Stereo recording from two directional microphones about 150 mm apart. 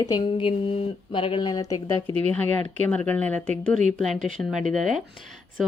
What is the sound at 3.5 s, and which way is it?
A woman's voice, 55° right (ahead or behind).